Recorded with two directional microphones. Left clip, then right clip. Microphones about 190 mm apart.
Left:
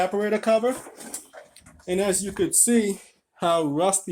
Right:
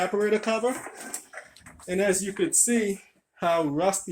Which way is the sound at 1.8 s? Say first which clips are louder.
Left 1 dB; 30° left (ahead or behind).